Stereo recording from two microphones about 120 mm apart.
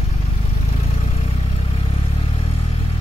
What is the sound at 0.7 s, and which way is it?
Vehicle, 60° left (ahead or behind).